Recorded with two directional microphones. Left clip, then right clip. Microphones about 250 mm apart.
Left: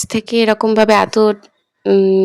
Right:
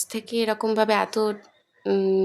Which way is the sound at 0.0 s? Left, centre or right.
Right.